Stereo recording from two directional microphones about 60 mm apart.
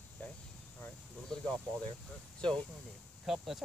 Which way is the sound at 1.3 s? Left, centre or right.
Centre.